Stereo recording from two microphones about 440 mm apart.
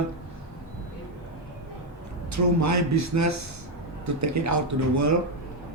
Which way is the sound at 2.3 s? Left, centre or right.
Right.